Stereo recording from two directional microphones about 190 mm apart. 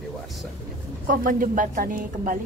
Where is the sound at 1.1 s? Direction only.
45° right (ahead or behind).